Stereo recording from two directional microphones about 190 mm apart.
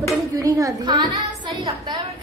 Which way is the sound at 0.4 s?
15° right (ahead or behind).